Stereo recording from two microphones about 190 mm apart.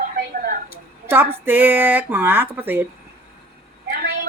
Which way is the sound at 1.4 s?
10° right (ahead or behind).